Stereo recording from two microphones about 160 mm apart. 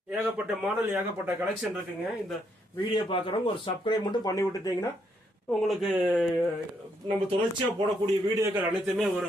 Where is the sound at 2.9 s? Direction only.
30° left (ahead or behind).